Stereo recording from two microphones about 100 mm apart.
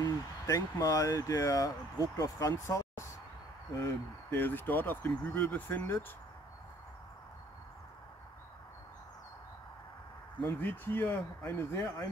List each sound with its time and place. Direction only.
0.0 s speech: 35° left (ahead or behind)
3.8 s speech: 20° left (ahead or behind)
10.6 s speech: 15° left (ahead or behind)